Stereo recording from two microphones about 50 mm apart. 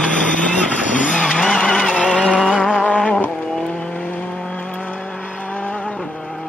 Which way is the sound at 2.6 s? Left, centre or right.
Centre.